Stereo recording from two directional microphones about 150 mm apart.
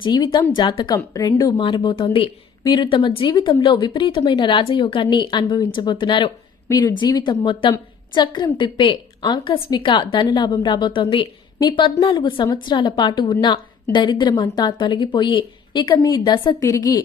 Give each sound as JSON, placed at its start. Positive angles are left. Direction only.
{"t": 0.0, "sound": "speech", "side_deg": 30}
{"t": 1.5, "sound": "a woman's voice", "side_deg": 35}
{"t": 1.8, "sound": "a woman's voice", "side_deg": 25}